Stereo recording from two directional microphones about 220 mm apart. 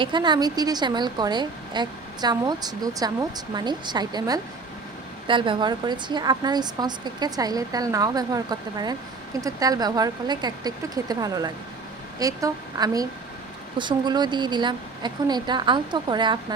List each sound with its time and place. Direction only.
0.0 s a woman's voice: 20° right (ahead or behind)